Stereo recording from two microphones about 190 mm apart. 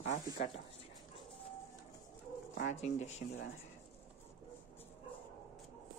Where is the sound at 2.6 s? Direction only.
35° left (ahead or behind).